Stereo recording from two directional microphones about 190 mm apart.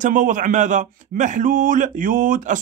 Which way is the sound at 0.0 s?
45° right (ahead or behind).